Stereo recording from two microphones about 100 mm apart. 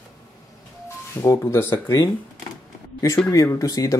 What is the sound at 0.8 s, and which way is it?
Speech, 30° left (ahead or behind).